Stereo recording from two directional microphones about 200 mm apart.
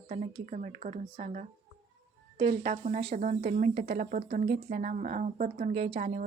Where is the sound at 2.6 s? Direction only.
35° right (ahead or behind).